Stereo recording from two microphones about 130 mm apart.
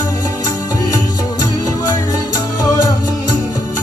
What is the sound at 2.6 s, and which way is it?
Music, 25° left (ahead or behind).